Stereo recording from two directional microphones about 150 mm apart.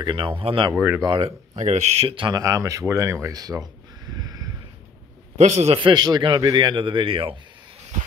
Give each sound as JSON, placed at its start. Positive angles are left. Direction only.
{"t": 0.0, "sound": "a man's voice", "side_deg": -35}
{"t": 0.7, "sound": "speech", "side_deg": -10}
{"t": 1.0, "sound": "speech", "side_deg": -30}
{"t": 1.6, "sound": "a man's voice", "side_deg": -50}
{"t": 2.4, "sound": "speech", "side_deg": -20}
{"t": 4.2, "sound": "a sound", "side_deg": -25}
{"t": 5.4, "sound": "a man's voice", "side_deg": -45}